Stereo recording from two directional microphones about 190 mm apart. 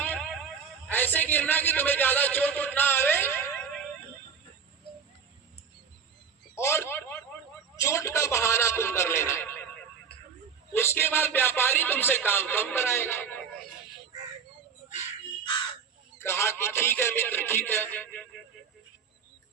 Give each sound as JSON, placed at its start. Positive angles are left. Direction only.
{"t": 0.0, "sound": "a sound", "side_deg": 10}
{"t": 0.9, "sound": "speech", "side_deg": 10}
{"t": 6.6, "sound": "speech", "side_deg": 15}
{"t": 10.8, "sound": "speech", "side_deg": 10}
{"t": 16.1, "sound": "speech", "side_deg": 15}